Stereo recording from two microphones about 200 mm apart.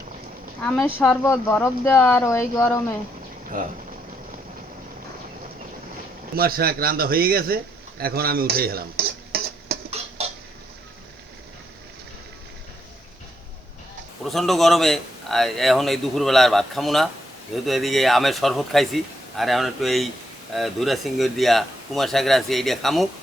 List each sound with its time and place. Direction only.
0.6 s speech: 5° left (ahead or behind)
3.5 s speech: 40° right (ahead or behind)
6.3 s speech: 50° right (ahead or behind)
10.0 s dishes: 30° right (ahead or behind)
14.3 s a man's voice: centre (ahead or behind)